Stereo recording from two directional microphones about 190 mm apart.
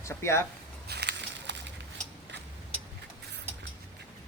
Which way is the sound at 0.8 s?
60° right (ahead or behind).